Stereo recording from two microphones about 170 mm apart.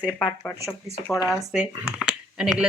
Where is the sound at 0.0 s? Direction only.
5° left (ahead or behind).